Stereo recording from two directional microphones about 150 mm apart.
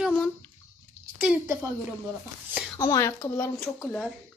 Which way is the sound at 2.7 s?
25° left (ahead or behind).